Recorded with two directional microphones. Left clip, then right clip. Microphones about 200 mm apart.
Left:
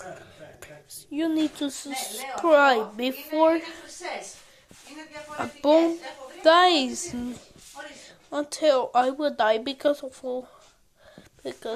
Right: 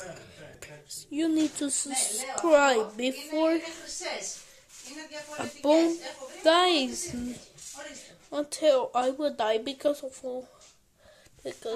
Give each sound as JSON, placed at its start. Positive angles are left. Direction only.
{"t": 0.6, "sound": "speech", "side_deg": -10}
{"t": 5.4, "sound": "speech", "side_deg": 0}
{"t": 11.5, "sound": "speech", "side_deg": 5}